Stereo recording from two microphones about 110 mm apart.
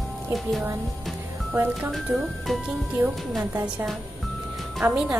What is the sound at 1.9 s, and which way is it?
Speech, centre (ahead or behind).